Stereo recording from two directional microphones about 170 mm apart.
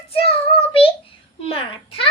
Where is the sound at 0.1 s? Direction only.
35° left (ahead or behind).